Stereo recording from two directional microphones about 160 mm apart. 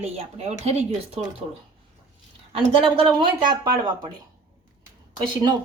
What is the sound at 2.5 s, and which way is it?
Speech, 40° right (ahead or behind).